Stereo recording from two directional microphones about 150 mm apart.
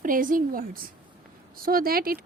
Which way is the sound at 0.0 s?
65° right (ahead or behind).